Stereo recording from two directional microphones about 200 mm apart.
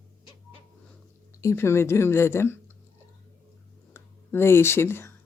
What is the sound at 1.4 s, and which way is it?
Speech, 15° left (ahead or behind).